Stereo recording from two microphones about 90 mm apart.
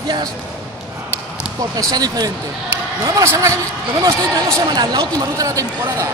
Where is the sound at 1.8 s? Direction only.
45° right (ahead or behind).